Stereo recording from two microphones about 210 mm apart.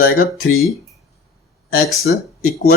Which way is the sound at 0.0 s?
45° left (ahead or behind).